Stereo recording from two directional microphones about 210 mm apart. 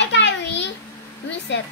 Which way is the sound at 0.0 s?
55° left (ahead or behind).